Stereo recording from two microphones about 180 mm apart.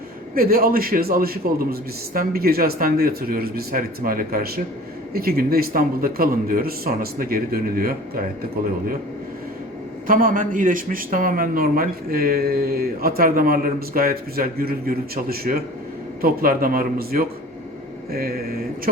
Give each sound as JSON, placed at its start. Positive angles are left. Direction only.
{"t": 0.3, "sound": "a man's voice", "side_deg": -55}
{"t": 10.1, "sound": "a man's voice", "side_deg": -50}